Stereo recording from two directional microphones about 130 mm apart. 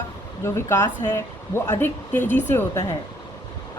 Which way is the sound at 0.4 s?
20° left (ahead or behind).